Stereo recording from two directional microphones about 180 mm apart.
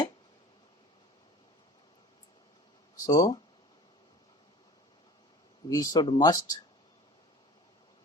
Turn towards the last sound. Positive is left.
turn(degrees=20)  # may be behind; listen again after turning